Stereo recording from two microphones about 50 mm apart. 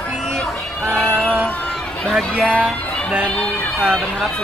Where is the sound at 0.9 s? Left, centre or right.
Centre.